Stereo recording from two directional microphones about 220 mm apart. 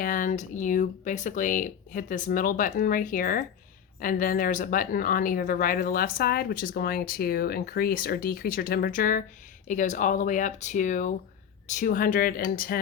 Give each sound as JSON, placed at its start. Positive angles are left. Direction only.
{"t": 0.0, "sound": "speech", "side_deg": 40}